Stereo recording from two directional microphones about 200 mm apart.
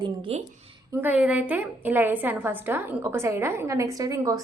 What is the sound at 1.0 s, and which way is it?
A woman's voice, 5° right (ahead or behind).